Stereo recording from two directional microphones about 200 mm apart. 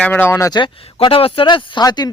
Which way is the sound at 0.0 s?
10° left (ahead or behind).